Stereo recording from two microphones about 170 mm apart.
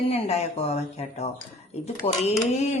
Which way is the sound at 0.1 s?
40° left (ahead or behind).